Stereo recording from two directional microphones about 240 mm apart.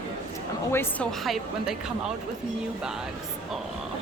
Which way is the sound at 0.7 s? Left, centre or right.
Centre.